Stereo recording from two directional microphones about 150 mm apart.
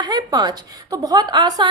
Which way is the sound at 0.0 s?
25° right (ahead or behind).